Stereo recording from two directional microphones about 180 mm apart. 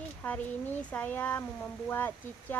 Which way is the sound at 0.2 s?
10° left (ahead or behind).